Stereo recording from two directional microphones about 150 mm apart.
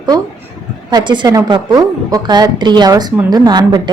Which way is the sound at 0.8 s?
30° right (ahead or behind).